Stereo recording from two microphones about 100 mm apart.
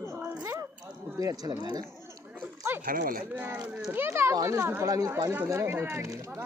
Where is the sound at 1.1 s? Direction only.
40° right (ahead or behind).